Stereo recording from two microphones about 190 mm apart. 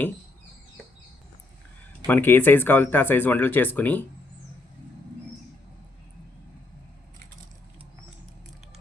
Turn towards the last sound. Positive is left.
turn(degrees=-40)  # may be behind; listen again after turning